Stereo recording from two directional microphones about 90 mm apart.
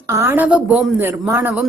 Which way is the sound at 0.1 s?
25° right (ahead or behind).